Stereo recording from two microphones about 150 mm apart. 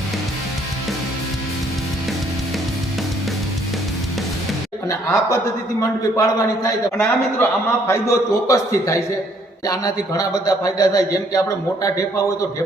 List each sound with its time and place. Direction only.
4.9 s a man's voice: 20° left (ahead or behind)